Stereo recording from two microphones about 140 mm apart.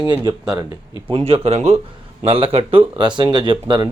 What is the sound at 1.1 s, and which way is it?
Speech, 40° right (ahead or behind).